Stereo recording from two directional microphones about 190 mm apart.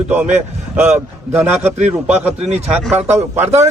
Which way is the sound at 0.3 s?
10° right (ahead or behind).